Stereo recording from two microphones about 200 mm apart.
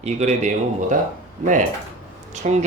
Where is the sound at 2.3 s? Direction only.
35° right (ahead or behind).